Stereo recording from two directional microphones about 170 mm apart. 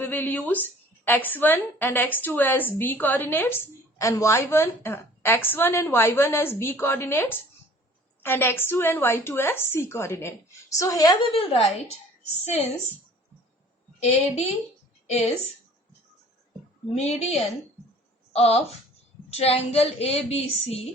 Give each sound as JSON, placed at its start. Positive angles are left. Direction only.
{"t": 0.0, "sound": "a woman's voice", "side_deg": 10}
{"t": 11.3, "sound": "a woman's voice", "side_deg": 35}
{"t": 14.0, "sound": "a woman's voice", "side_deg": 40}
{"t": 16.9, "sound": "a woman's voice", "side_deg": 40}
{"t": 18.3, "sound": "a woman's voice", "side_deg": 35}